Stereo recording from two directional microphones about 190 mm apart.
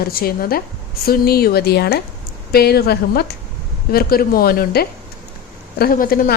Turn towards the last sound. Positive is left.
turn(degrees=50)  # may be behind; listen again after turning